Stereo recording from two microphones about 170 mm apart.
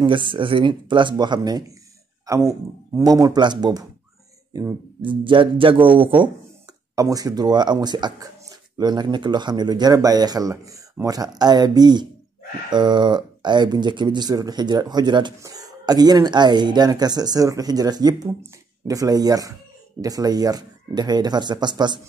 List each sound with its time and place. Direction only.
0.0 s speech: 30° right (ahead or behind)